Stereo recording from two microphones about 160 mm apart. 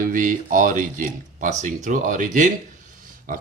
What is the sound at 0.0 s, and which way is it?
Speech, 55° right (ahead or behind).